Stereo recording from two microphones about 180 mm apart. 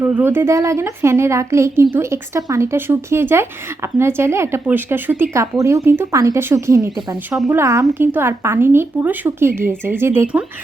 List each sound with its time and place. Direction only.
0.0 s speech: 10° right (ahead or behind)